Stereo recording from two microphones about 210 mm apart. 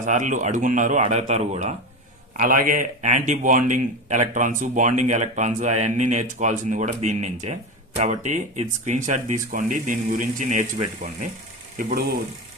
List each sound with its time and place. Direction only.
0.0 s speech: 35° right (ahead or behind)